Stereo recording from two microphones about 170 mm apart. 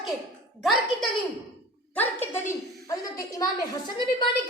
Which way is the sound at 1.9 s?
15° left (ahead or behind).